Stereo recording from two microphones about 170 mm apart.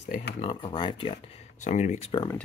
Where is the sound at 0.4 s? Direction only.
30° left (ahead or behind).